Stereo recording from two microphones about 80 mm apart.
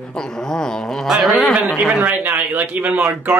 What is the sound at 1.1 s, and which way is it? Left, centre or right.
A man's voice, centre.